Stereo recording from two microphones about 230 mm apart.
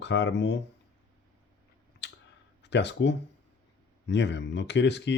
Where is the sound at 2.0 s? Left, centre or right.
Left.